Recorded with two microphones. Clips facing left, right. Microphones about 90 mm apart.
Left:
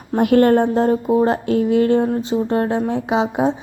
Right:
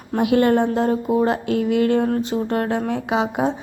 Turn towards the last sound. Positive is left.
turn(degrees=25)  # may be behind; listen again after turning